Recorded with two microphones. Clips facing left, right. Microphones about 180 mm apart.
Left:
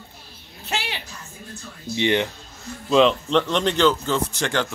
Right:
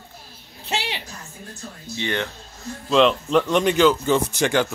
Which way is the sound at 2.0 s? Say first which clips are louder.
Left 5 dB; 15° left (ahead or behind).